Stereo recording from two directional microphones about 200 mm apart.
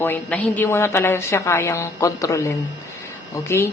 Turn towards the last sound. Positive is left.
turn(degrees=15)  # may be behind; listen again after turning